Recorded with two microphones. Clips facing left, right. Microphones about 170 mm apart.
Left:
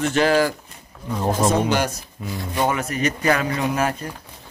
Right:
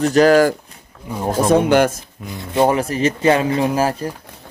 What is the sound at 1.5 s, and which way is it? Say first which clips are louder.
Speech: right 7 dB; 55° right (ahead or behind).